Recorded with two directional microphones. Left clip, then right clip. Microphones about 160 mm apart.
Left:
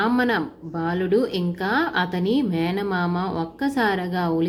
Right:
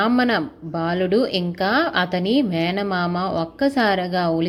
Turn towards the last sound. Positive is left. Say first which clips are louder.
# right 3 dB
turn(degrees=-20)  # may be behind; listen again after turning